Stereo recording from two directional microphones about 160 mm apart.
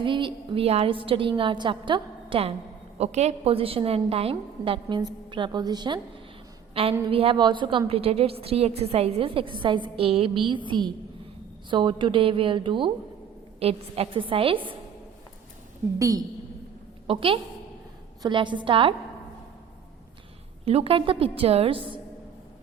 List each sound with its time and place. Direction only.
0.0 s a woman's voice: 30° right (ahead or behind)
3.0 s a woman's voice: 45° right (ahead or behind); by 6.0 s 25° right (ahead or behind)
6.8 s a woman's voice: 35° right (ahead or behind)
16.0 s a woman's voice: 20° right (ahead or behind)
17.1 s a woman's voice: 35° right (ahead or behind)
20.7 s a woman's voice: 40° right (ahead or behind)